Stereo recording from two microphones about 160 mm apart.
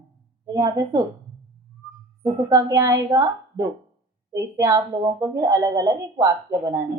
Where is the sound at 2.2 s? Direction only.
20° right (ahead or behind).